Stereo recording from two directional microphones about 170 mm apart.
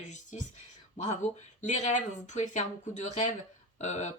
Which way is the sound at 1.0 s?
45° left (ahead or behind).